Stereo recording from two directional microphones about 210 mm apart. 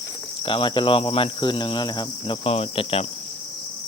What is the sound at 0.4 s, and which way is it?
Speech, 25° left (ahead or behind).